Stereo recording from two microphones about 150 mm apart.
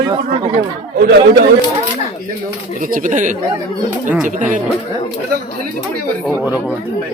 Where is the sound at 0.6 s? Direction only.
90° right.